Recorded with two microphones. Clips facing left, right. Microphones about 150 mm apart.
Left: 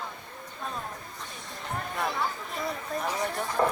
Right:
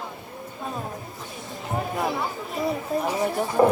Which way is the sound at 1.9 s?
5° right (ahead or behind).